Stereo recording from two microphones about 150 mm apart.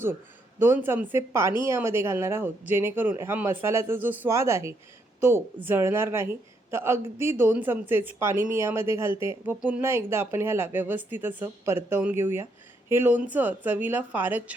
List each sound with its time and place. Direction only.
0.6 s a woman's voice: 15° right (ahead or behind)